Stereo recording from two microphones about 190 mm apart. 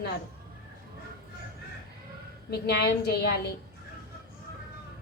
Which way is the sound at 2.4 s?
60° left (ahead or behind).